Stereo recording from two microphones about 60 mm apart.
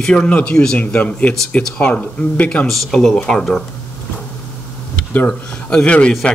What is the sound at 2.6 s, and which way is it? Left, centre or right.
Speech, centre.